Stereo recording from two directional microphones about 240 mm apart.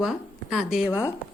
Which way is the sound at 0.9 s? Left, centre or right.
Centre.